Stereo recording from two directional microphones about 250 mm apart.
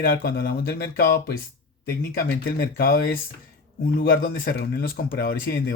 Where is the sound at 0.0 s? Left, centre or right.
Left.